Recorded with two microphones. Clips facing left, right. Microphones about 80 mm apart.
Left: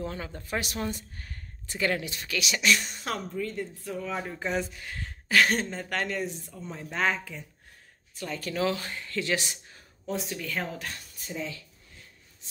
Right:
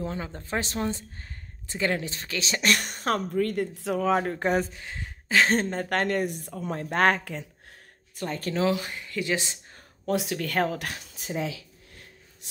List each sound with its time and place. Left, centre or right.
0.0 s speech: right
2.7 s speech: right
3.4 s speech: right
4.7 s a sound: right
5.6 s speech: right
8.2 s speech: right
8.5 s speech: centre
10.0 s speech: right